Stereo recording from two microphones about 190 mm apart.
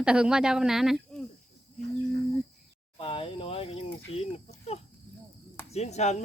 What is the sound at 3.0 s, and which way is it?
Speech, 30° left (ahead or behind).